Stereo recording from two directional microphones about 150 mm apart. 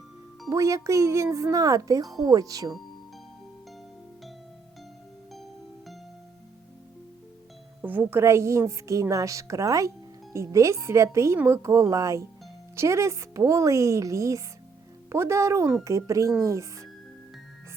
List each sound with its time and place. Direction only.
0.5 s a woman's voice: 20° right (ahead or behind)
7.8 s a woman's voice: 10° right (ahead or behind)